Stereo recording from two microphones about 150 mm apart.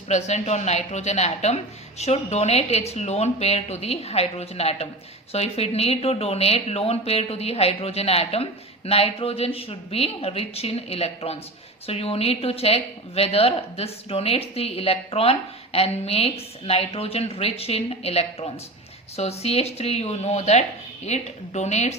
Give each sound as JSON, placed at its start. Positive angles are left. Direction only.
{"t": 0.1, "sound": "speech", "side_deg": 50}